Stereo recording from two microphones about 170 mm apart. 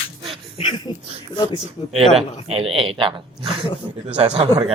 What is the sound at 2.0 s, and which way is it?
Speech, centre (ahead or behind).